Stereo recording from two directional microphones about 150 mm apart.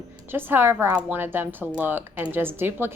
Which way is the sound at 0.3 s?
15° right (ahead or behind).